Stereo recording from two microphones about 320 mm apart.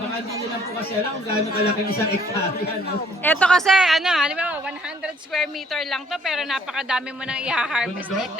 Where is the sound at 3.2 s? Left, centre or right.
Centre.